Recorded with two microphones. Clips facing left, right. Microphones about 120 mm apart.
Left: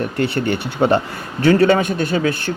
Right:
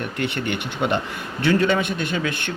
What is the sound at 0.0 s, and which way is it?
A man's voice, 35° left (ahead or behind).